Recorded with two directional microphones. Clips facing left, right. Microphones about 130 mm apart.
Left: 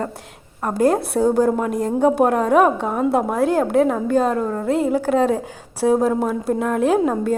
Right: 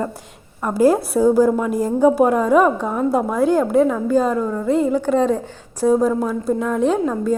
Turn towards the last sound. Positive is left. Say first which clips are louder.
# left 1 dB
turn(degrees=5)  # may be behind; listen again after turning